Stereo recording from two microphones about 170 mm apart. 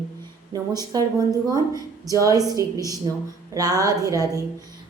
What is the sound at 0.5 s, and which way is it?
A woman's voice, 20° right (ahead or behind).